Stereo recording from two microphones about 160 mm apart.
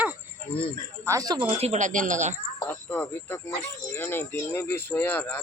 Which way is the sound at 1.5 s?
45° right (ahead or behind).